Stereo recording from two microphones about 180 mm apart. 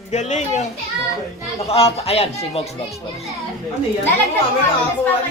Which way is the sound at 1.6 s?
35° left (ahead or behind).